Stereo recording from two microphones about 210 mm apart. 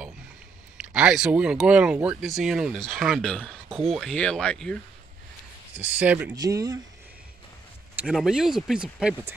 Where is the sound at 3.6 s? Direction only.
25° right (ahead or behind).